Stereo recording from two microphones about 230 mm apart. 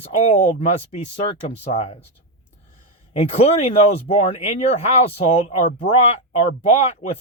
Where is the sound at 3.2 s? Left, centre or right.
Left.